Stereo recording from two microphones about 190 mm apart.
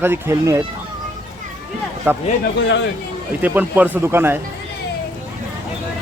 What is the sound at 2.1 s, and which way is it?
Speech, 10° right (ahead or behind).